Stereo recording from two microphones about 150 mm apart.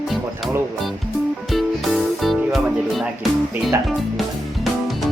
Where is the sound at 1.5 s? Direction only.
Centre (ahead or behind).